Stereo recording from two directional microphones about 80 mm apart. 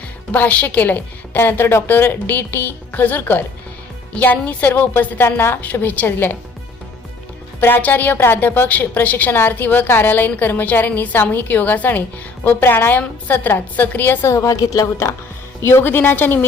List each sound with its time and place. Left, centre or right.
0.3 s a woman's voice: centre
7.6 s a woman's voice: left
14.3 s a woman's voice: left
15.6 s a woman's voice: left